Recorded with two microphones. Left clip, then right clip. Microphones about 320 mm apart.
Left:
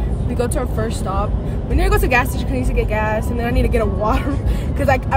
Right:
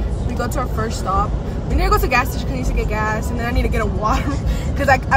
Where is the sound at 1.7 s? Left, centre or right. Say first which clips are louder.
Even; centre.